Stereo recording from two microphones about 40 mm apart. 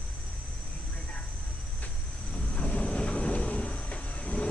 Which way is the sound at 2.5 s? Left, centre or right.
Left.